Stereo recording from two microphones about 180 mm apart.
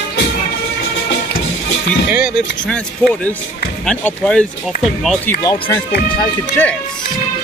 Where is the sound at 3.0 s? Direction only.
5° left (ahead or behind).